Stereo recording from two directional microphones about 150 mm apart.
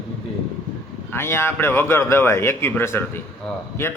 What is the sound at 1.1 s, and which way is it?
A man's voice, 15° left (ahead or behind).